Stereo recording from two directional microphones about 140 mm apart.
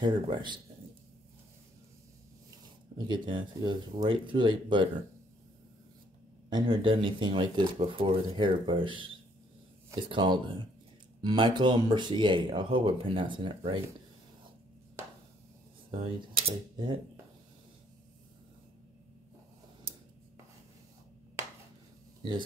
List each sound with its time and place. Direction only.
0.0 s speech: 35° right (ahead or behind)
3.1 s speech: 35° right (ahead or behind)
6.5 s speech: 35° right (ahead or behind)
15.9 s speech: 45° right (ahead or behind)